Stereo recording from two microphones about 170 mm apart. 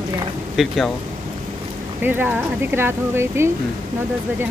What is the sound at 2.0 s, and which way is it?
Speech, 10° right (ahead or behind).